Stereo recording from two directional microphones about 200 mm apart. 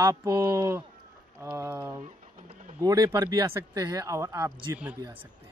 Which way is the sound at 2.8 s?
15° right (ahead or behind).